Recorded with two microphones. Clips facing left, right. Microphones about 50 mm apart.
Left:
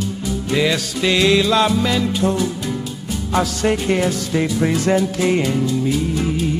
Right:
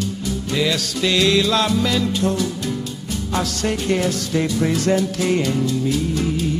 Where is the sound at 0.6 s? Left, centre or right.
Left.